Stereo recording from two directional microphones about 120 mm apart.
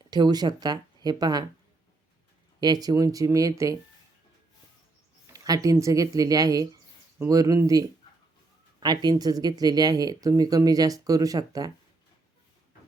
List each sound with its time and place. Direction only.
0.1 s speech: 35° right (ahead or behind)
2.6 s speech: 35° right (ahead or behind)
5.3 s speech: 30° right (ahead or behind)